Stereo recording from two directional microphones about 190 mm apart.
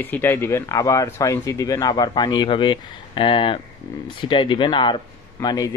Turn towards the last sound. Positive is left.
turn(degrees=20)  # may be behind; listen again after turning